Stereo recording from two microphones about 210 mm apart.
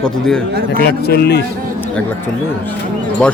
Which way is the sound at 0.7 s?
50° left (ahead or behind).